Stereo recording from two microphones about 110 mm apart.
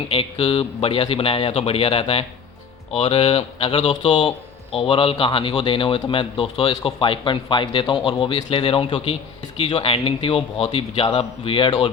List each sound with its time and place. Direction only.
0.1 s speech: 55° left (ahead or behind)